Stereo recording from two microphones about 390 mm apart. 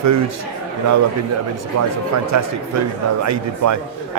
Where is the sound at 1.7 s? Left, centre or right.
Right.